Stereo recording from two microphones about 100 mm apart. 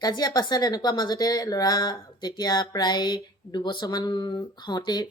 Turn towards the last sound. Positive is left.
turn(degrees=45)  # may be behind; listen again after turning